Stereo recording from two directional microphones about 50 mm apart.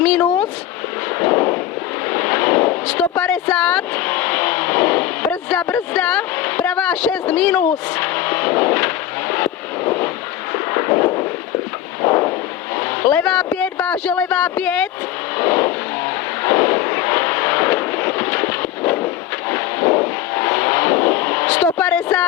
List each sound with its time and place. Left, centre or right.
1.2 s artillery fire: left
2.0 s a sound: left
2.8 s vehicle: left
5.3 s a sound: left
5.9 s vehicle: left
7.5 s vehicle: left
10.5 s a sound: left
12.0 s artillery fire: left
12.7 s speech: left
15.4 s vehicle: left